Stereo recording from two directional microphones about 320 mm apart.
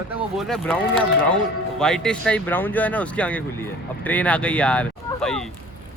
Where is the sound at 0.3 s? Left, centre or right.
Centre.